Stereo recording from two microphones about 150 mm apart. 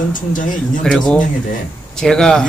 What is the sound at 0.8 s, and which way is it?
Speech, 5° left (ahead or behind).